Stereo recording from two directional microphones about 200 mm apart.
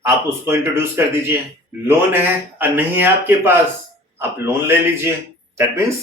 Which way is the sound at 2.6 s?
10° right (ahead or behind).